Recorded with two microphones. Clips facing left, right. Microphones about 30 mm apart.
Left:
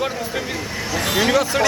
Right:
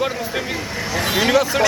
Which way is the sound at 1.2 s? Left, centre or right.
Centre.